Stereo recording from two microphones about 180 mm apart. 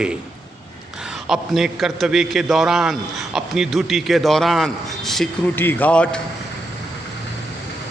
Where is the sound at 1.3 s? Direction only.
Centre (ahead or behind).